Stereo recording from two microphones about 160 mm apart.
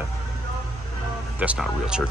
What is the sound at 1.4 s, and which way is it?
Speech, 5° right (ahead or behind).